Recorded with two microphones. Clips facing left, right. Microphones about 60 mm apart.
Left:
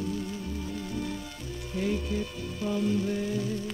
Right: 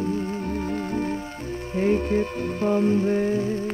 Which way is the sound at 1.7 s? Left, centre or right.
Right.